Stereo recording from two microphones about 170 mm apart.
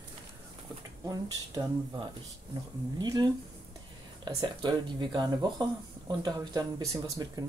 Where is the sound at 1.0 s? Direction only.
25° right (ahead or behind).